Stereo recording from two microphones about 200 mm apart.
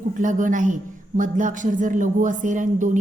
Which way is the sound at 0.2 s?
40° right (ahead or behind).